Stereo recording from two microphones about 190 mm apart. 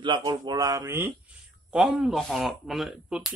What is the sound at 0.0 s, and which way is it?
A man's voice, 25° right (ahead or behind).